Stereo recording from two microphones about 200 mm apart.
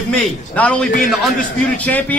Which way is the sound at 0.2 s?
5° left (ahead or behind).